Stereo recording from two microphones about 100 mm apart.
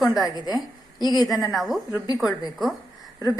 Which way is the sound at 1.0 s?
45° left (ahead or behind).